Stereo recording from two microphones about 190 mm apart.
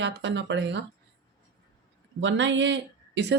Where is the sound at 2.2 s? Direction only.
80° right.